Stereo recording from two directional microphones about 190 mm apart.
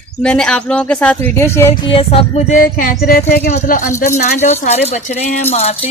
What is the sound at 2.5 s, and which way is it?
Speech, 45° left (ahead or behind).